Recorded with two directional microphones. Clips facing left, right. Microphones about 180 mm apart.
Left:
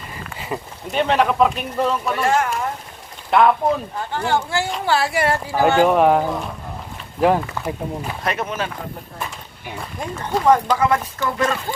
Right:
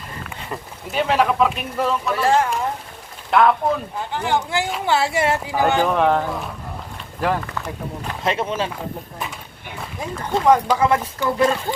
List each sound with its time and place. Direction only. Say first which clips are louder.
0.3 s speech: left 6 dB; 5° left (ahead or behind)
2.2 s speech: right 2 dB; 30° right (ahead or behind)
3.2 s speech: left 1 dB; centre (ahead or behind)
4.1 s speech: left 1 dB; 15° right (ahead or behind)
5.6 s speech: left 4 dB; 15° left (ahead or behind)
8.2 s speech: right 3 dB; 25° right (ahead or behind)
10.0 s speech: even; centre (ahead or behind)
10.8 s speech: even; 25° right (ahead or behind)